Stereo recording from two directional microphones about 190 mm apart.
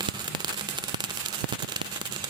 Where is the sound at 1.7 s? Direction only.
25° right (ahead or behind).